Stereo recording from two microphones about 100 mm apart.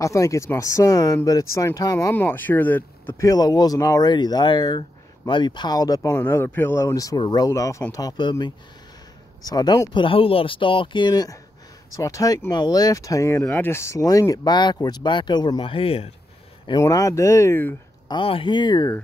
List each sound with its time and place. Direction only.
0.0 s speech: 30° left (ahead or behind)
2.1 s speech: 20° left (ahead or behind)
3.2 s speech: 35° left (ahead or behind)
4.1 s speech: 45° left (ahead or behind)
7.2 s speech: 45° left (ahead or behind)
7.4 s speech: 30° left (ahead or behind)
9.9 s speech: 65° left (ahead or behind); by 13.4 s 35° left (ahead or behind)
13.4 s speech: 20° left (ahead or behind); by 15.7 s 45° left (ahead or behind)
15.7 s speech: 70° left (ahead or behind)
16.8 s speech: 30° left (ahead or behind)
18.2 s speech: 60° left (ahead or behind)